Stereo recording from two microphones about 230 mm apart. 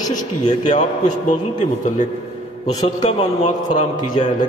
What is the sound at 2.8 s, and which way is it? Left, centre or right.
A man's voice, left.